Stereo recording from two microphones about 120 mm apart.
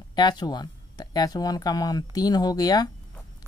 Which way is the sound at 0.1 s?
35° left (ahead or behind).